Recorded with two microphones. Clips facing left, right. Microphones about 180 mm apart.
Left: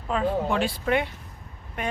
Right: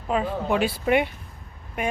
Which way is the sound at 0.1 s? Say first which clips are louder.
Right 1 dB; 10° right (ahead or behind).